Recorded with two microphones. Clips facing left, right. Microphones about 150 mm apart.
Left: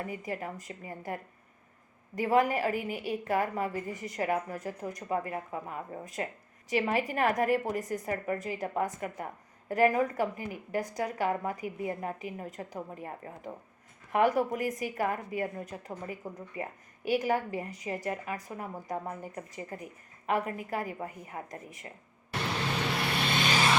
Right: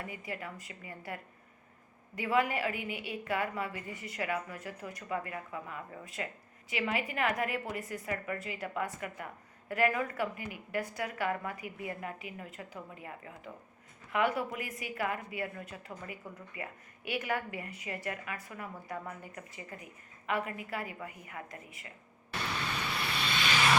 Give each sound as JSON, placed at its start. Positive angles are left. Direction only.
{"t": 0.0, "sound": "a woman's voice", "side_deg": 40}
{"t": 22.8, "sound": "vehicle", "side_deg": 60}